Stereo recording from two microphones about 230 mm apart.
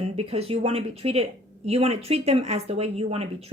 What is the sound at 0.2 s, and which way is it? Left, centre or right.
Speech, right.